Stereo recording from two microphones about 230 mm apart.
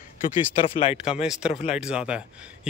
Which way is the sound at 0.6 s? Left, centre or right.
Left.